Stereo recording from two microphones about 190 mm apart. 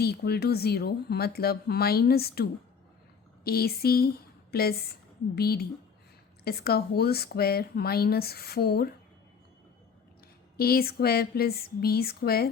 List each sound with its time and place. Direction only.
0.0 s a woman's voice: 55° left (ahead or behind)
10.6 s speech: 55° left (ahead or behind)